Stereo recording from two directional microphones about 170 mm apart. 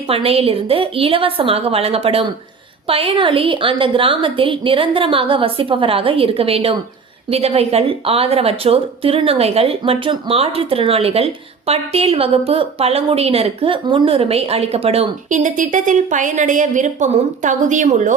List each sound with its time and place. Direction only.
0.1 s speech: 35° right (ahead or behind)